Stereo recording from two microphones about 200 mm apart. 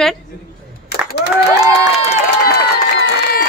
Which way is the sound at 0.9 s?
50° left (ahead or behind).